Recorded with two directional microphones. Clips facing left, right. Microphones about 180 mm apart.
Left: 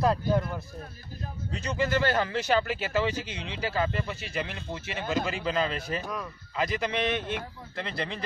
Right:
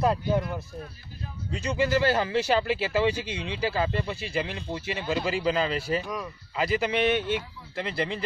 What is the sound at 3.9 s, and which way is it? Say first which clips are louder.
Speech: right 3 dB; 25° right (ahead or behind).